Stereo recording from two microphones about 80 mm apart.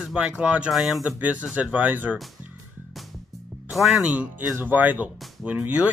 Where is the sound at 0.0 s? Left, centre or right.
Centre.